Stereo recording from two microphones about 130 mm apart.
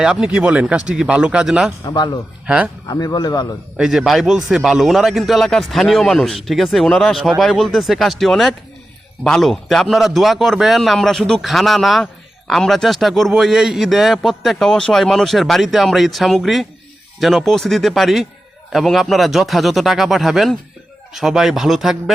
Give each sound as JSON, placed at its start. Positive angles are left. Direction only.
{"t": 0.0, "sound": "speech", "side_deg": -5}
{"t": 1.8, "sound": "speech", "side_deg": 30}
{"t": 3.8, "sound": "a man's voice", "side_deg": -5}